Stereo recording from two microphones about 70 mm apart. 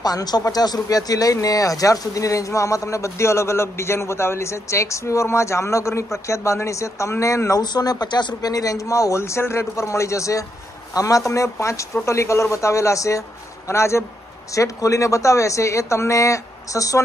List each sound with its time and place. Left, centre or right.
0.0 s speech: left
7.6 s a man's voice: left